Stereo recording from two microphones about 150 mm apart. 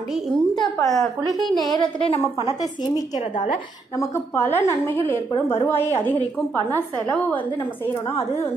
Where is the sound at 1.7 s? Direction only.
35° left (ahead or behind).